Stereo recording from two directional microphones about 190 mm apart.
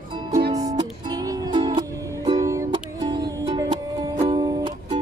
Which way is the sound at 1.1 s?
20° right (ahead or behind).